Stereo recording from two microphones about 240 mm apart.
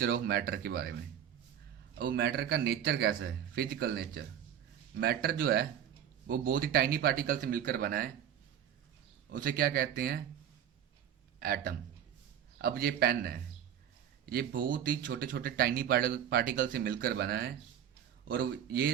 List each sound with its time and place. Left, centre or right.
0.0 s speech: right
2.0 s speech: right
9.3 s speech: right
11.3 s speech: right